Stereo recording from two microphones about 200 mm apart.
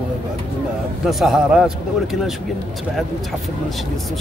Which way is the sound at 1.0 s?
Centre (ahead or behind).